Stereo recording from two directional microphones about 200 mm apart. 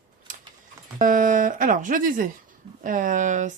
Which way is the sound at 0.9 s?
40° right (ahead or behind).